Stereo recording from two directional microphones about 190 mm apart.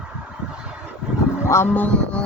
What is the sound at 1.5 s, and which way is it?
Speech, 10° left (ahead or behind).